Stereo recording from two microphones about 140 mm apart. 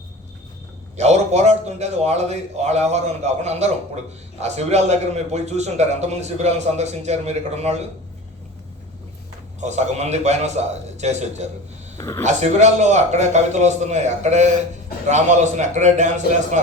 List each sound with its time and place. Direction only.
0.9 s a man's voice: 50° right (ahead or behind)
9.6 s a man's voice: 55° right (ahead or behind)
11.9 s speech: 20° left (ahead or behind)
12.2 s a man's voice: 55° right (ahead or behind)